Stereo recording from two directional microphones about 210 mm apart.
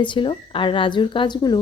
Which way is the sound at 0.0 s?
25° left (ahead or behind).